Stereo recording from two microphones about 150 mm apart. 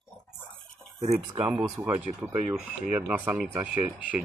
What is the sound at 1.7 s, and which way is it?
Speech, 10° right (ahead or behind).